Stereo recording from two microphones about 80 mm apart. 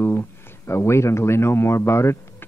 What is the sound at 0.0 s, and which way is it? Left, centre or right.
Speech, left.